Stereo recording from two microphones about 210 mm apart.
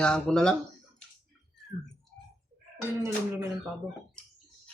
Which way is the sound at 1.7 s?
40° left (ahead or behind).